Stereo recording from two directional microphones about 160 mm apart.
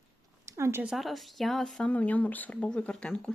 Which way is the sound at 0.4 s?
15° right (ahead or behind).